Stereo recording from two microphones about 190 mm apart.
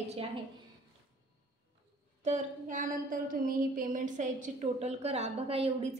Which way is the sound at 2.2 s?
40° right (ahead or behind).